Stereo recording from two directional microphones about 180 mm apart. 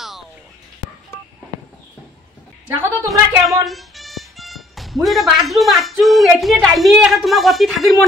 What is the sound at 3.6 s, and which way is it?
A woman's voice, centre (ahead or behind).